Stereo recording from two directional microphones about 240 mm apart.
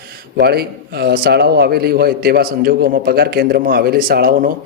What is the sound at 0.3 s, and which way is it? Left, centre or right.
A man's voice, right.